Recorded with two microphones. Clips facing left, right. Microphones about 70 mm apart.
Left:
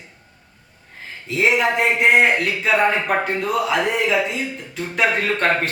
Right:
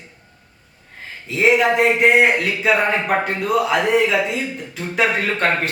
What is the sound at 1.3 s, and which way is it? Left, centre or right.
Speech, centre.